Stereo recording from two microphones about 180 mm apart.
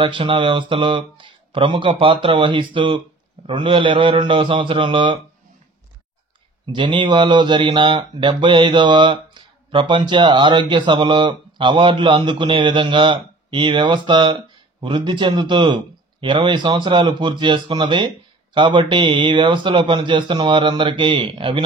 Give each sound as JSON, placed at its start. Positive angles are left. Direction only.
{"t": 0.0, "sound": "speech", "side_deg": -25}
{"t": 6.6, "sound": "speech", "side_deg": -25}